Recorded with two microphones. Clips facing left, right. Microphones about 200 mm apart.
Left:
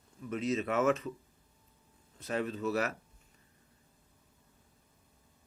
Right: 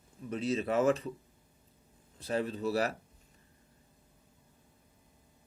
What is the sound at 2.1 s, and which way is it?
Speech, 35° right (ahead or behind).